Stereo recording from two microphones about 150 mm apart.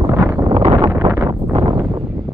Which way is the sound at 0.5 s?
30° right (ahead or behind).